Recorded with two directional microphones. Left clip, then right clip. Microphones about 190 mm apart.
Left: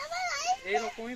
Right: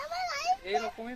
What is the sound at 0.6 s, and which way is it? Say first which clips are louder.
Speech: left 1 dB; 30° right (ahead or behind).